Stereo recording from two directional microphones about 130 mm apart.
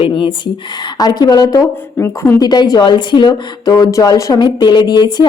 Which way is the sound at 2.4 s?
30° left (ahead or behind).